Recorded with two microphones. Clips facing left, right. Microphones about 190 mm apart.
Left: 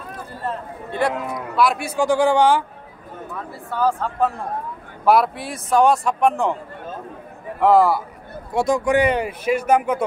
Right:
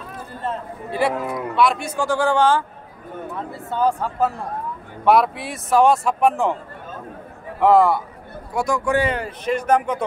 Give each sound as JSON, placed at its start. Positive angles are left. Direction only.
{"t": 0.9, "sound": "a man's voice", "side_deg": -5}
{"t": 3.7, "sound": "speech", "side_deg": -20}
{"t": 5.0, "sound": "speech", "side_deg": 0}
{"t": 7.6, "sound": "speech", "side_deg": 0}
{"t": 8.5, "sound": "a man's voice", "side_deg": 20}